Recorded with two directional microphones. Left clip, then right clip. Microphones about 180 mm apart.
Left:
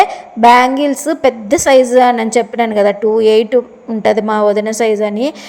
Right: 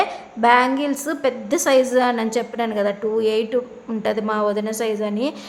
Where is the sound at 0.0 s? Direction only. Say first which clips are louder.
Left 10 dB; 30° left (ahead or behind).